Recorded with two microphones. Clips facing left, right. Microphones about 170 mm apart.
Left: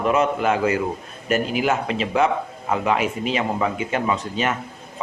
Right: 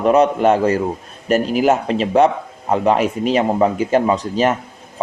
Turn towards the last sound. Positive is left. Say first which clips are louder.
# right 6 dB
turn(degrees=-35)  # may be behind; listen again after turning